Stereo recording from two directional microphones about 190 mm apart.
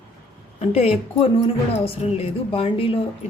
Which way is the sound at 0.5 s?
30° left (ahead or behind).